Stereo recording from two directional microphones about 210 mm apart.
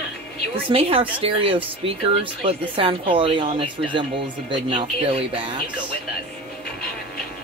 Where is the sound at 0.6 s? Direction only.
25° right (ahead or behind).